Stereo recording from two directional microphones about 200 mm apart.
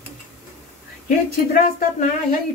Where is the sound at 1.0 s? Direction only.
40° left (ahead or behind).